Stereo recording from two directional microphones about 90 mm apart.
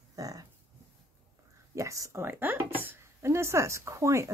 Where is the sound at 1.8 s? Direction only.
35° right (ahead or behind).